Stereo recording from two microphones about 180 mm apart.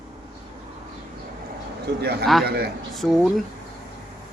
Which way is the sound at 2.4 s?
60° right (ahead or behind).